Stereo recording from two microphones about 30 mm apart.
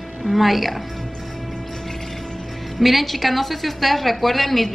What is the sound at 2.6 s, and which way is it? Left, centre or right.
A woman's voice, centre.